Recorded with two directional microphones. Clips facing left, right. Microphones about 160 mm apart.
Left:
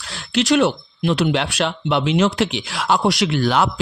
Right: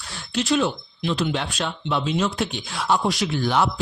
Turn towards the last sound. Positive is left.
turn(degrees=90)